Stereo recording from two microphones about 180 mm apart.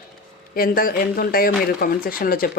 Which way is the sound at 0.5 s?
55° left (ahead or behind).